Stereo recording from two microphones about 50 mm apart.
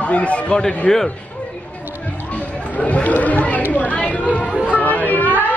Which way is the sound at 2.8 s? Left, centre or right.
Left.